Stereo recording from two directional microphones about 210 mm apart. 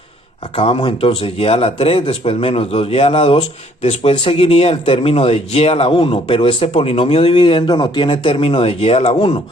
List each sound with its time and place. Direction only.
0.5 s speech: 25° left (ahead or behind)